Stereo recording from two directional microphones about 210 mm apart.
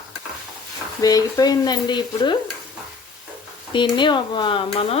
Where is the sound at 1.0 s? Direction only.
20° left (ahead or behind).